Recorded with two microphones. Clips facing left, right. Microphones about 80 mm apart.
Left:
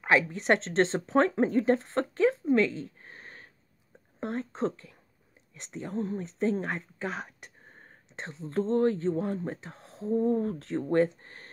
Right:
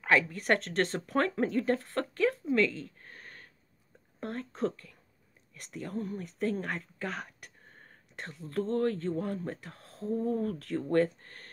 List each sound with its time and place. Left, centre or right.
0.0 s speech: centre
2.5 s a sound: left
4.2 s speech: left